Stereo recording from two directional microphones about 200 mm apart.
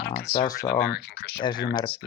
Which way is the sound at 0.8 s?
55° left (ahead or behind).